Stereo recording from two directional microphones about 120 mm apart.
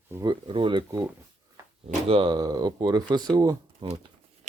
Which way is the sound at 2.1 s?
50° right (ahead or behind).